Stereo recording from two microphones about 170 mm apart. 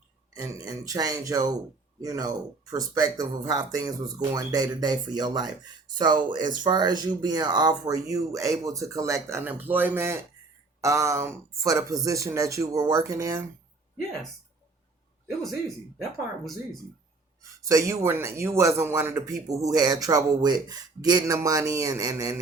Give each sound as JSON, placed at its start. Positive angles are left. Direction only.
{"t": 0.3, "sound": "a man's voice", "side_deg": -20}
{"t": 15.4, "sound": "a man's voice", "side_deg": 0}
{"t": 17.6, "sound": "a man's voice", "side_deg": -20}